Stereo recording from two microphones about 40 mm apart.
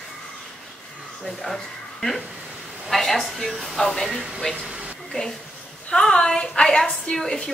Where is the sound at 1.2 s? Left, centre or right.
Centre.